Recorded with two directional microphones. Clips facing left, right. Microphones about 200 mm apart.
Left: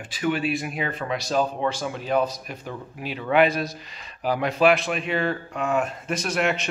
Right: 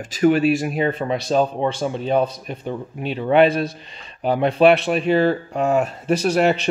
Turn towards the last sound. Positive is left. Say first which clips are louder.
# right 7 dB
turn(degrees=-35)  # may be behind; listen again after turning